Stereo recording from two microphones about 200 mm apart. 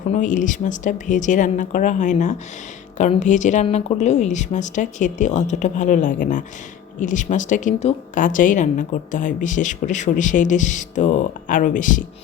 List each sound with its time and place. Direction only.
0.1 s a woman's voice: 40° left (ahead or behind)